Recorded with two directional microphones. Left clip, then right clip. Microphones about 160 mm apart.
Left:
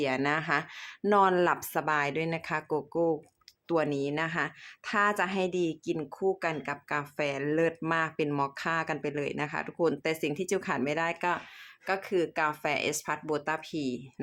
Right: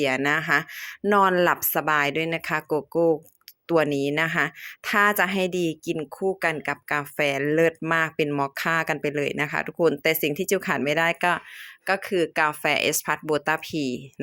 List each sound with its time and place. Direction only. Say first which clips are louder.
0.0 s a woman's voice: right 6 dB; 25° right (ahead or behind)